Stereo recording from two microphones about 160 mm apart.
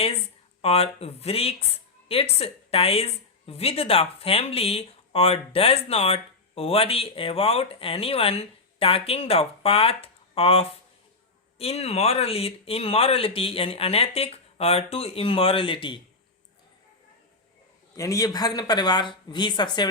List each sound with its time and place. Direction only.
0.6 s a woman's voice: 40° left (ahead or behind)
17.9 s speech: 20° left (ahead or behind)